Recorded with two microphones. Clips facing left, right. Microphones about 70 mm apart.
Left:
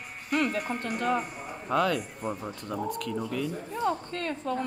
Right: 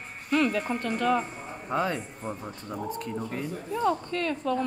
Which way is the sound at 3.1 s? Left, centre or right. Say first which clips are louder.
Left 2 dB; right.